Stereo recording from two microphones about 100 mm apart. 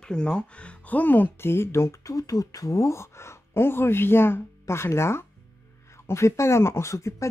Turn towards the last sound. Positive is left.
turn(degrees=30)  # may be behind; listen again after turning